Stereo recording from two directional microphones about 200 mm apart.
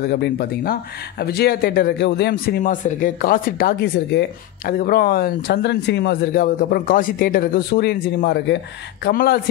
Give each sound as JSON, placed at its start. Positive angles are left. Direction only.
{"t": 0.0, "sound": "speech", "side_deg": 55}
{"t": 2.6, "sound": "speech", "side_deg": 40}